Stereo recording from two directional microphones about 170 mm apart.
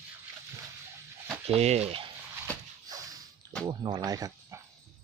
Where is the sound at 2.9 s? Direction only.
20° right (ahead or behind).